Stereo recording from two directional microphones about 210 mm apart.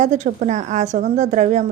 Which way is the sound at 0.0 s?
35° right (ahead or behind).